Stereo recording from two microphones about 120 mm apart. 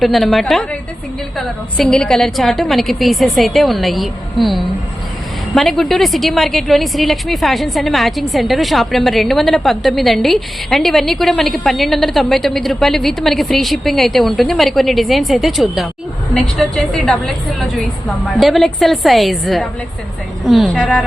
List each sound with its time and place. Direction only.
0.0 s a woman's voice: centre (ahead or behind)
18.3 s a woman's voice: centre (ahead or behind)